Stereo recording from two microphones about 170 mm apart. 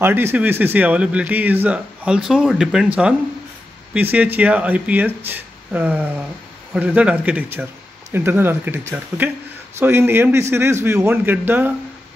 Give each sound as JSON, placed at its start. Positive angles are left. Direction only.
{"t": 0.0, "sound": "speech", "side_deg": -10}
{"t": 3.9, "sound": "speech", "side_deg": -10}